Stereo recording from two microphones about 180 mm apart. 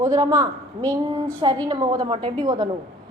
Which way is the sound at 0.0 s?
20° right (ahead or behind).